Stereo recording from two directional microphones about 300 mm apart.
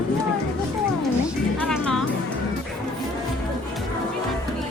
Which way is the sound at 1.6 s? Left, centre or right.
Centre.